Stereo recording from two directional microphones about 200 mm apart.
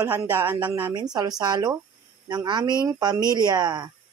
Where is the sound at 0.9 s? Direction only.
20° right (ahead or behind).